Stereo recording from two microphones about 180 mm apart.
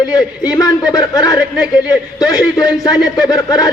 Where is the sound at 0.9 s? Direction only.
20° left (ahead or behind).